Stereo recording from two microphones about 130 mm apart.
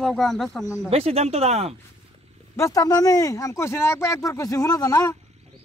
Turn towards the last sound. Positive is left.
turn(degrees=25)  # may be behind; listen again after turning